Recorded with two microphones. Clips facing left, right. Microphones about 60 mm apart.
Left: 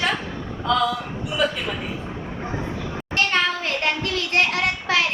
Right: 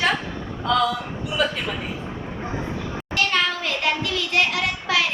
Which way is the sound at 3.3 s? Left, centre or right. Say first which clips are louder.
Left 1 dB; left.